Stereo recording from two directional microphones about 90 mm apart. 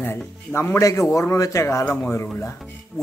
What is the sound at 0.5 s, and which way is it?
A man's voice, 30° left (ahead or behind).